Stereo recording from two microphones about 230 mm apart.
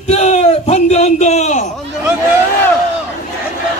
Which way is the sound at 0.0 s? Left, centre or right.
Left.